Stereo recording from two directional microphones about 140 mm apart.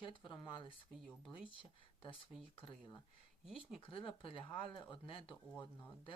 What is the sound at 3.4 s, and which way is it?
Speech, centre (ahead or behind).